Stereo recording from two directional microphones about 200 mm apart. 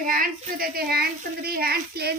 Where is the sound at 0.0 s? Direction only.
45° right (ahead or behind).